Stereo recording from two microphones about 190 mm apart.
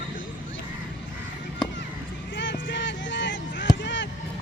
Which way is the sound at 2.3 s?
70° left (ahead or behind).